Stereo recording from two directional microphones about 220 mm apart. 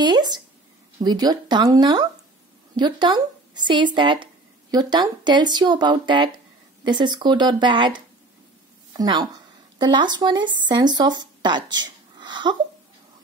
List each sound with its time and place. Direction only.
0.0 s speech: 20° right (ahead or behind)
8.9 s speech: 20° right (ahead or behind)